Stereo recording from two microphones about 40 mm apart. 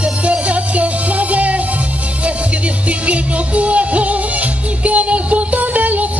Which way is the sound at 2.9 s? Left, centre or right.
Right.